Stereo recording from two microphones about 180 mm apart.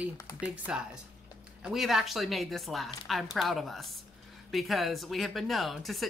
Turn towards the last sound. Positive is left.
turn(degrees=0)  # may be behind; listen again after turning